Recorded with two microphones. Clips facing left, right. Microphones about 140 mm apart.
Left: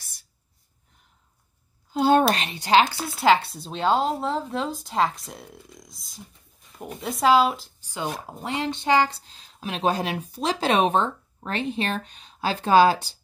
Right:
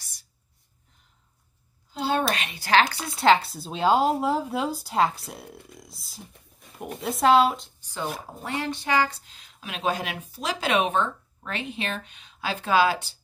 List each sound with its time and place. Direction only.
2.0 s a sound: 50° left (ahead or behind)
2.2 s speech: 30° left (ahead or behind)
2.9 s speech: 5° left (ahead or behind)
8.3 s a woman's voice: 20° left (ahead or behind); by 13.2 s 35° left (ahead or behind)